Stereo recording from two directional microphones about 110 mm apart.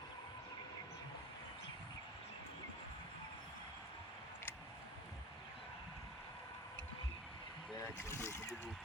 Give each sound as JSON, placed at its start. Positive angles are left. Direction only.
{"t": 7.8, "sound": "speech", "side_deg": 25}